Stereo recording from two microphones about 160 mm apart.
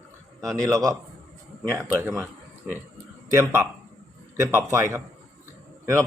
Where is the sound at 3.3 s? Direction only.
15° right (ahead or behind).